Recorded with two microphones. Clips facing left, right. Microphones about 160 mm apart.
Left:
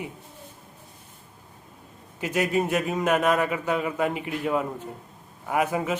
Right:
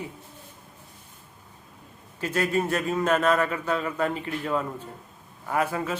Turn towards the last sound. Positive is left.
turn(degrees=15)  # may be behind; listen again after turning